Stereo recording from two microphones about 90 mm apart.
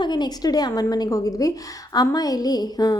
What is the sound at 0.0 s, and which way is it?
A woman's voice, 55° left (ahead or behind).